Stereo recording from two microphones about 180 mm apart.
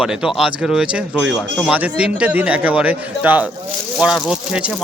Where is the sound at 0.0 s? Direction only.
5° right (ahead or behind).